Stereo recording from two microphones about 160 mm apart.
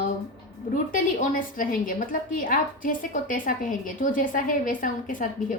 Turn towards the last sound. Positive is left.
turn(degrees=55)  # may be behind; listen again after turning